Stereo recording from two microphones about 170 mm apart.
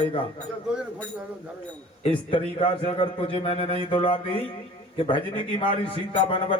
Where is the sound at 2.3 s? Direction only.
30° left (ahead or behind).